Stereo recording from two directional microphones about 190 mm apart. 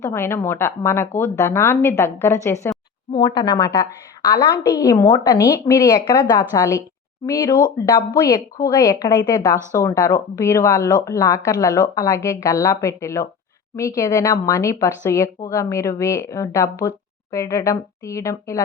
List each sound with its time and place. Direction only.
0.0 s a woman's voice: 15° left (ahead or behind)